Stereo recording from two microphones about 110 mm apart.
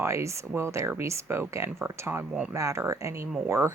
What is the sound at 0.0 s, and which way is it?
Speech, 25° right (ahead or behind).